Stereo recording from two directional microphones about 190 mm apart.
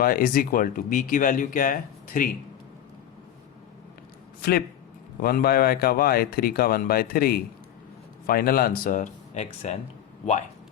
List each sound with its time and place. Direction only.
0.0 s speech: 50° left (ahead or behind)
4.4 s a sound: 55° left (ahead or behind)
5.2 s speech: 50° left (ahead or behind); by 9.7 s 35° left (ahead or behind)